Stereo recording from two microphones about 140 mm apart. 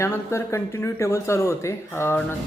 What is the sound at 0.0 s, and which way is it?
Speech, 20° left (ahead or behind).